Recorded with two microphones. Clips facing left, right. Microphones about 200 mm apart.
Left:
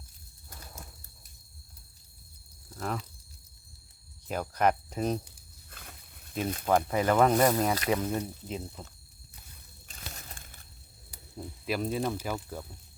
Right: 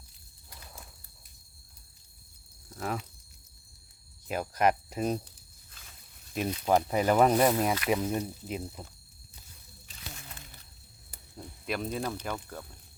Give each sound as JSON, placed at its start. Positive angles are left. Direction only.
{"t": 2.7, "sound": "a sound", "side_deg": -5}
{"t": 4.3, "sound": "speech", "side_deg": -5}
{"t": 6.7, "sound": "speech", "side_deg": -15}
{"t": 9.8, "sound": "crumpling", "side_deg": 50}
{"t": 11.6, "sound": "speech", "side_deg": 0}